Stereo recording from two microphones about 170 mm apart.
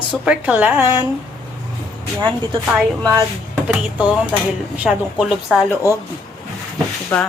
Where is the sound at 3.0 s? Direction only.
20° right (ahead or behind).